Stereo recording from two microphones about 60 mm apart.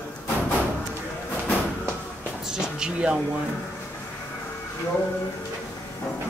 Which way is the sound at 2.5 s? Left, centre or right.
Centre.